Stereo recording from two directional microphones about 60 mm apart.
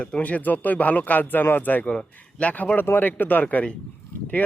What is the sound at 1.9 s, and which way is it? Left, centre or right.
Speech, centre.